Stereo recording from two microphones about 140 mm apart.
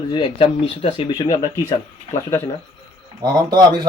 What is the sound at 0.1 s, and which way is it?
Speech, 35° left (ahead or behind).